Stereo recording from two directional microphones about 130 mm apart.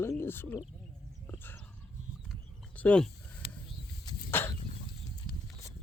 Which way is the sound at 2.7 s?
10° left (ahead or behind).